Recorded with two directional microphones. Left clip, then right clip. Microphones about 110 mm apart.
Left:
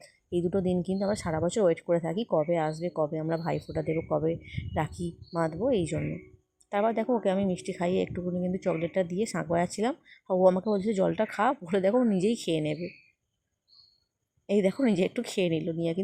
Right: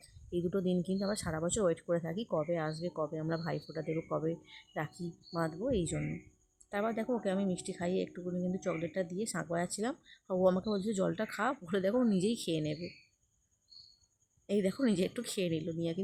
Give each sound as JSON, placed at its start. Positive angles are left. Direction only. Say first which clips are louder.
{"t": 0.0, "sound": "speech", "louder": "left 7 dB", "side_deg": 30}
{"t": 14.4, "sound": "speech", "louder": "left 7 dB", "side_deg": 35}